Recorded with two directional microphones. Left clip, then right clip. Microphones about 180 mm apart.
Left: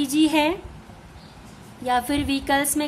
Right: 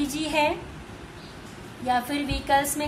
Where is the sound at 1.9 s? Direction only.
50° left (ahead or behind).